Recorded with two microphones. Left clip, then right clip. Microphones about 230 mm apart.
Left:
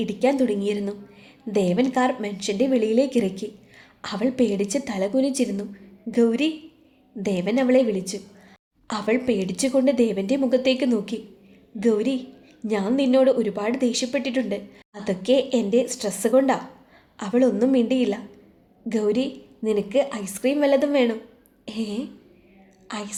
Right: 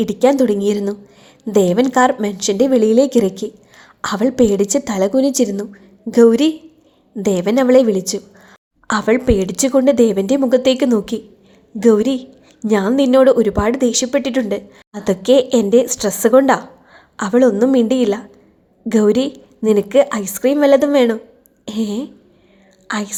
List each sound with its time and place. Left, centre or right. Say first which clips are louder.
0.0 s a woman's voice: right 8 dB; right